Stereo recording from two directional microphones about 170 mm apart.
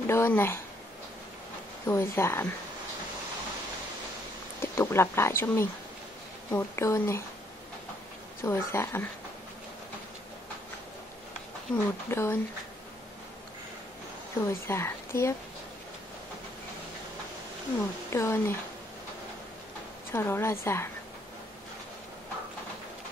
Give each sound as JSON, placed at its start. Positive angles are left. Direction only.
{"t": 0.0, "sound": "speech", "side_deg": 15}
{"t": 1.9, "sound": "speech", "side_deg": 15}
{"t": 4.6, "sound": "speech", "side_deg": 15}
{"t": 8.5, "sound": "speech", "side_deg": 15}
{"t": 11.7, "sound": "speech", "side_deg": 15}
{"t": 14.4, "sound": "speech", "side_deg": 15}
{"t": 18.1, "sound": "speech", "side_deg": 15}
{"t": 20.1, "sound": "speech", "side_deg": 15}